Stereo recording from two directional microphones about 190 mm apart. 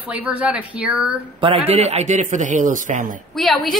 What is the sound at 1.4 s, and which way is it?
A man's voice, 30° right (ahead or behind).